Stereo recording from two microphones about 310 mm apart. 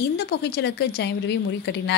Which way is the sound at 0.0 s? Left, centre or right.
Left.